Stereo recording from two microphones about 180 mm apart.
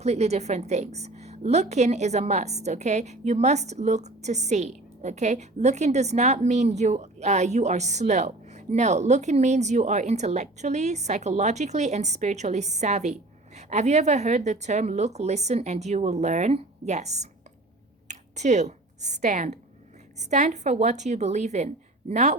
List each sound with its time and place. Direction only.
0.0 s a woman's voice: 35° right (ahead or behind)